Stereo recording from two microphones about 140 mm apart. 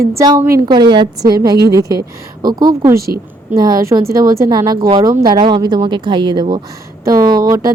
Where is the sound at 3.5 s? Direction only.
25° right (ahead or behind).